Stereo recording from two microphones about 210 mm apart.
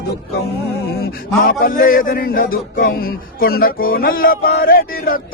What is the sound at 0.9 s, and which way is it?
A man's voice, 45° left (ahead or behind).